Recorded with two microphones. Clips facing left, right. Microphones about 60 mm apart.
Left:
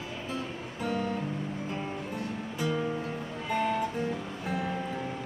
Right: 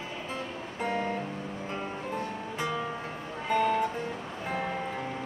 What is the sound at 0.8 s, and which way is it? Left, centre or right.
Music, right.